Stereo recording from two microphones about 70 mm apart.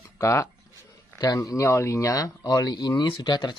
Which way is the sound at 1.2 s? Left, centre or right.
Left.